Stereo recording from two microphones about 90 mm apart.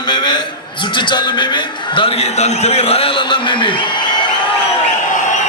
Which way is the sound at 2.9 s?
90° left.